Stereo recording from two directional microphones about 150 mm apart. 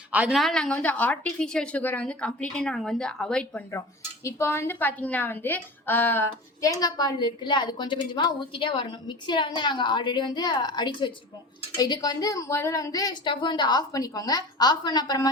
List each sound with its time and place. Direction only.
0.1 s a woman's voice: 10° right (ahead or behind)
3.7 s speech: 20° left (ahead or behind)